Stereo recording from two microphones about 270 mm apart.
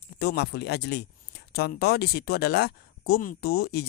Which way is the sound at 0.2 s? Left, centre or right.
Left.